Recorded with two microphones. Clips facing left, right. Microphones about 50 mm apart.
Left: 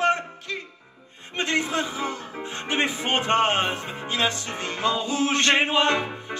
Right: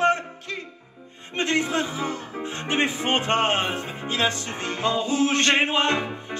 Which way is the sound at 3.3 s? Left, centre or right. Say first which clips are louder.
Left 4 dB; left.